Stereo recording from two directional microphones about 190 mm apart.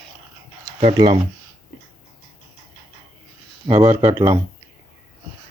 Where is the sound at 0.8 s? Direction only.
25° right (ahead or behind).